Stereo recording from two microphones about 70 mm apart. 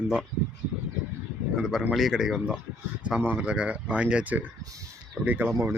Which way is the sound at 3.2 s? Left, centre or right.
Right.